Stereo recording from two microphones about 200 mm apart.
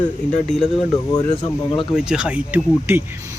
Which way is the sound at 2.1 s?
5° right (ahead or behind).